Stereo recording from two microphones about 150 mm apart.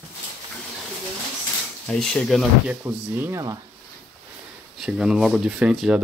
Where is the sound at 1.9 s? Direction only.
5° left (ahead or behind).